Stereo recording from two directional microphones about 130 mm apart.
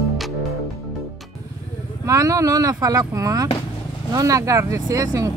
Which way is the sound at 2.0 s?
25° right (ahead or behind).